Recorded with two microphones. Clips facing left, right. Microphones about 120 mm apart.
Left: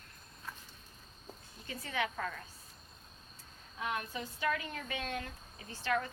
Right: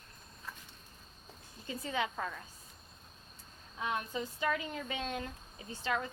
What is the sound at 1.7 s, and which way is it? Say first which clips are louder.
Speech: right 1 dB; 25° right (ahead or behind).